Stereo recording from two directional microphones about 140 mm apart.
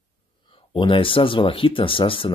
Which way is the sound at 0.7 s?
40° left (ahead or behind).